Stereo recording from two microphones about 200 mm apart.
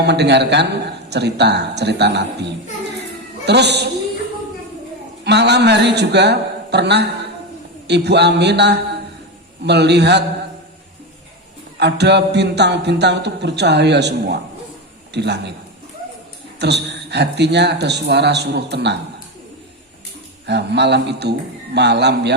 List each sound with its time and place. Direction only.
0.0 s speech: 55° right (ahead or behind)
5.2 s speech: 55° right (ahead or behind)
11.8 s speech: 55° right (ahead or behind)
16.6 s speech: 55° right (ahead or behind)
20.5 s speech: 55° right (ahead or behind)